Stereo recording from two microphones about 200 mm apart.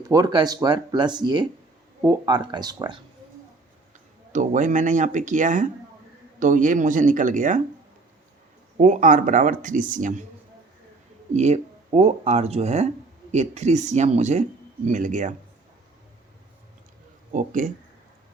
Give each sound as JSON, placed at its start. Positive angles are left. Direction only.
{"t": 0.0, "sound": "speech", "side_deg": -15}
{"t": 4.3, "sound": "speech", "side_deg": -40}
{"t": 8.8, "sound": "speech", "side_deg": -40}
{"t": 11.3, "sound": "speech", "side_deg": -35}
{"t": 17.3, "sound": "speech", "side_deg": -40}